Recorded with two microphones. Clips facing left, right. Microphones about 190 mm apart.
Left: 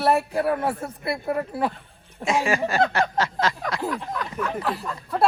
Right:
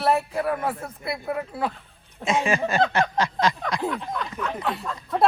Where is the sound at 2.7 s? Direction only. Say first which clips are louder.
Even; 15° right (ahead or behind).